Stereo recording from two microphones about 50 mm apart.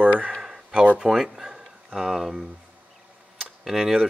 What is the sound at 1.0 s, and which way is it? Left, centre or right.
Speech, centre.